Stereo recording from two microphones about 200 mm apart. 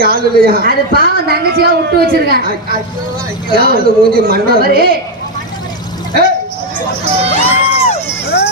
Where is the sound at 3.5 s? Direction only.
50° right (ahead or behind).